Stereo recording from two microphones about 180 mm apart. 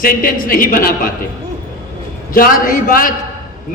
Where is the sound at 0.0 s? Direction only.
50° left (ahead or behind).